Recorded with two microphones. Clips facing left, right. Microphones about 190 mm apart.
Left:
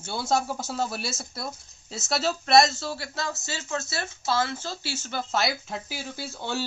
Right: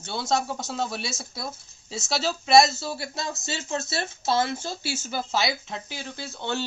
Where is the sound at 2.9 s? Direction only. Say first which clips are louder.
Even; 15° right (ahead or behind).